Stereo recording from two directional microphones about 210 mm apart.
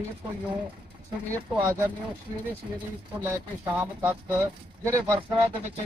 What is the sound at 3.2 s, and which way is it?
Speech, 10° right (ahead or behind).